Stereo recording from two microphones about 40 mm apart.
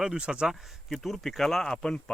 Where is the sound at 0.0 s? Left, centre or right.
Right.